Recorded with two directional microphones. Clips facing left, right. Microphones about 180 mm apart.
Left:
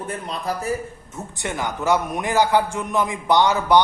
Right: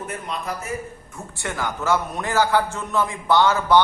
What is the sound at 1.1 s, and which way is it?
A man's voice, 20° left (ahead or behind).